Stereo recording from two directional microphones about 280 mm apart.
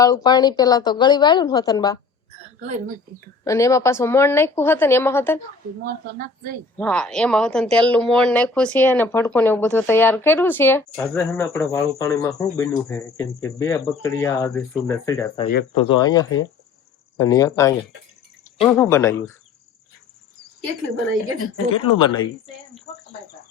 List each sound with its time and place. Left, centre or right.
0.0 s speech: centre
2.6 s speech: right
3.4 s speech: centre
5.8 s speech: right
6.7 s speech: centre
21.9 s speech: centre